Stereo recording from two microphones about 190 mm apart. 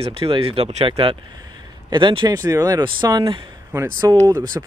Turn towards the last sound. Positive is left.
turn(degrees=-20)  # may be behind; listen again after turning